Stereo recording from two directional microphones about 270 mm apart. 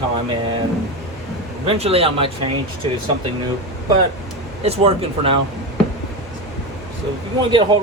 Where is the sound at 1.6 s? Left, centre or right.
Right.